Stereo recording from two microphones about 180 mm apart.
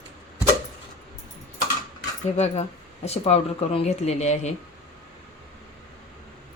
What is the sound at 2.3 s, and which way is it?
Speech, 35° left (ahead or behind).